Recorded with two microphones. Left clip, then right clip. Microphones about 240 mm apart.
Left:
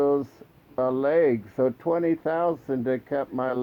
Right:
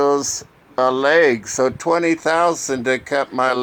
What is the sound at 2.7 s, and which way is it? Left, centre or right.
Speech, centre.